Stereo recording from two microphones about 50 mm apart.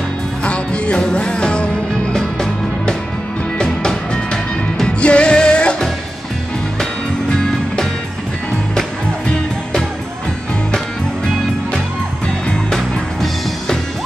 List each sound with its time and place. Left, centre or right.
0.4 s music: left
2.1 s music: centre